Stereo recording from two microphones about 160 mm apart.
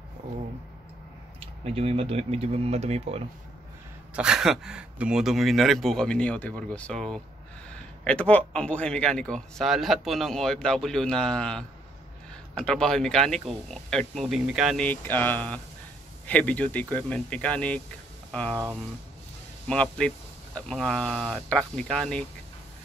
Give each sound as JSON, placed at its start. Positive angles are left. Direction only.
{"t": 1.4, "sound": "speech", "side_deg": -40}
{"t": 4.1, "sound": "a man's voice", "side_deg": -5}
{"t": 14.8, "sound": "speech", "side_deg": 10}
{"t": 19.7, "sound": "a man's voice", "side_deg": 5}